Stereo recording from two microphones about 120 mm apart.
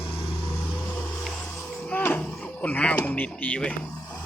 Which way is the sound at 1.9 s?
15° left (ahead or behind).